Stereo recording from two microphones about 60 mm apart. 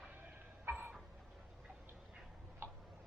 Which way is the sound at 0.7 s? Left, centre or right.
Right.